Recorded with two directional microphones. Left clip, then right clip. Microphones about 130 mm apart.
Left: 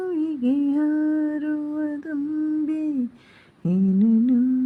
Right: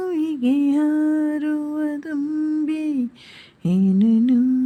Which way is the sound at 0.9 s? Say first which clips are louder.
Right 3 dB; 45° right (ahead or behind).